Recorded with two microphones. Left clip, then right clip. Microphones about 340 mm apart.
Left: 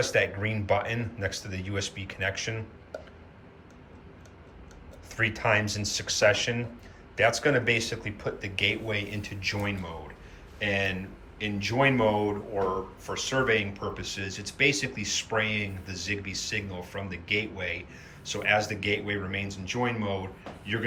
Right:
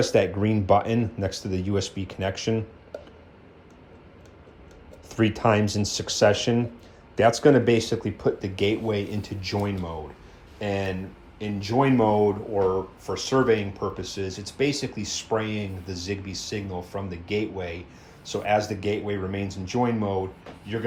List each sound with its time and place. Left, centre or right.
0.0 s speech: centre
2.9 s a sound: centre
5.0 s speech: centre